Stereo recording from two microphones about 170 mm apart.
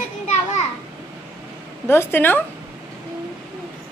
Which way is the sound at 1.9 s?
10° left (ahead or behind).